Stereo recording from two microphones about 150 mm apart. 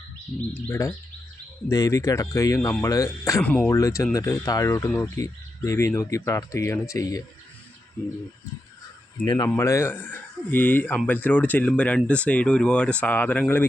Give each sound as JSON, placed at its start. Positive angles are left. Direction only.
{"t": 0.5, "sound": "speech", "side_deg": 20}
{"t": 3.4, "sound": "speech", "side_deg": 10}
{"t": 3.7, "sound": "speech", "side_deg": 20}
{"t": 9.2, "sound": "speech", "side_deg": 30}
{"t": 9.6, "sound": "speech", "side_deg": 20}